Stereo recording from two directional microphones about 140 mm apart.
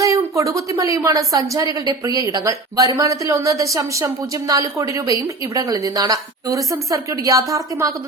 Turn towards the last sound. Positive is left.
turn(degrees=-25)  # may be behind; listen again after turning